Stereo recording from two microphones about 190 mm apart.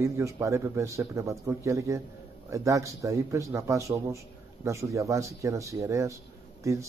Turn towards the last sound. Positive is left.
turn(degrees=-15)  # may be behind; listen again after turning